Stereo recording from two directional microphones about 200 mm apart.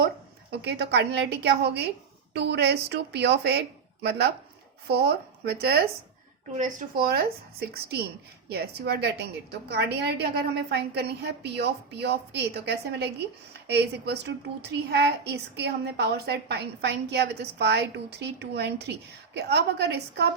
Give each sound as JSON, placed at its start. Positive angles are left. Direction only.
{"t": 0.5, "sound": "a woman's voice", "side_deg": -55}
{"t": 7.0, "sound": "a woman's voice", "side_deg": -50}